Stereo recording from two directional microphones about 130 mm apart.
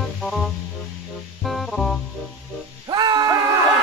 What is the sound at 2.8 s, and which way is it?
Music, 30° right (ahead or behind).